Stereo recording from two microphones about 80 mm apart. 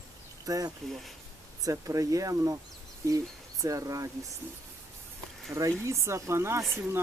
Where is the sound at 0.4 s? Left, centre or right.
Right.